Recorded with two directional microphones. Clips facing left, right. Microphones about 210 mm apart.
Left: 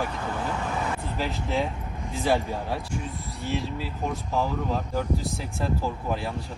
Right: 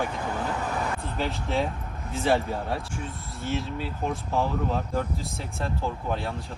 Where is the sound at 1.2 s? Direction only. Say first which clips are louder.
Right 1 dB; centre (ahead or behind).